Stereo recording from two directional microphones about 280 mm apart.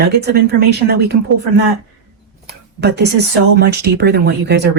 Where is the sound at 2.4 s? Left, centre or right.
Right.